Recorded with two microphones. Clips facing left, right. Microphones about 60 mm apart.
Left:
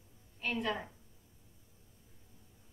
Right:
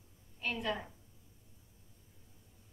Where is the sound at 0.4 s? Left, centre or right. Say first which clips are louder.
Left 1 dB; centre.